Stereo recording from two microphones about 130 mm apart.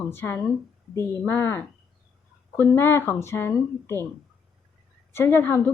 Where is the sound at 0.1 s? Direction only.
15° left (ahead or behind).